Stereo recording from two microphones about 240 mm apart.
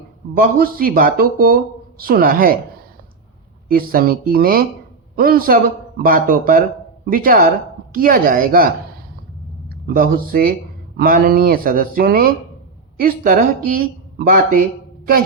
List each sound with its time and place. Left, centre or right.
0.3 s speech: right
3.7 s a man's voice: right